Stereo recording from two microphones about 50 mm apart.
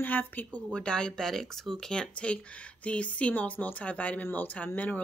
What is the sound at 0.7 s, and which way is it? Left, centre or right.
Speech, centre.